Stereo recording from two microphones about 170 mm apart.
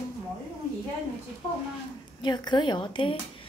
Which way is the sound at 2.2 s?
25° left (ahead or behind).